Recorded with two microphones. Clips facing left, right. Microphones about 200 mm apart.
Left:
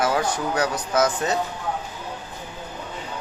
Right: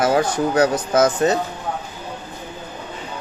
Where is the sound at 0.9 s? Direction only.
25° right (ahead or behind).